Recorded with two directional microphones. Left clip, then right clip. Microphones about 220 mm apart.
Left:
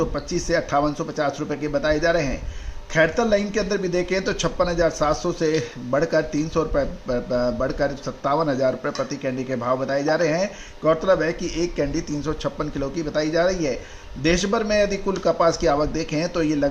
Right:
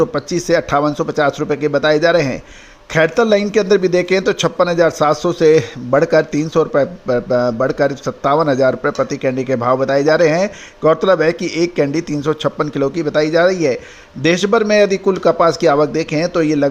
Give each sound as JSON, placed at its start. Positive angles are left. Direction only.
{"t": 0.0, "sound": "a man's voice", "side_deg": -40}